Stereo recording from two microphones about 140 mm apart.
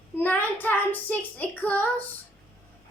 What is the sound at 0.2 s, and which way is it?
A child's voice, 15° left (ahead or behind).